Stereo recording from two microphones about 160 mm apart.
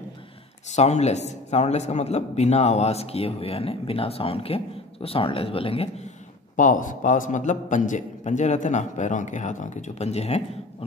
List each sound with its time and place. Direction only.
0.7 s speech: 45° left (ahead or behind)
6.5 s speech: 55° left (ahead or behind)